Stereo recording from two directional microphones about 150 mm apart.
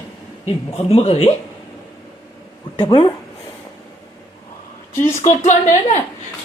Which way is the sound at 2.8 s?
30° left (ahead or behind).